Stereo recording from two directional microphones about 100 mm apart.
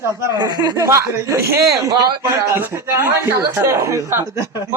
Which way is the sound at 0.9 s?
30° right (ahead or behind).